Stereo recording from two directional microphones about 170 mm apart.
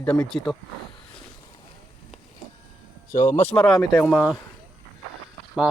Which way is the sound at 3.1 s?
45° left (ahead or behind).